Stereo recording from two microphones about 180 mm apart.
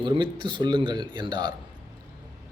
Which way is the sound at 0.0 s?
25° right (ahead or behind).